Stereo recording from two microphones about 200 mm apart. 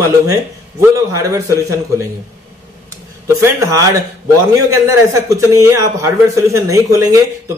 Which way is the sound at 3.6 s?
15° right (ahead or behind).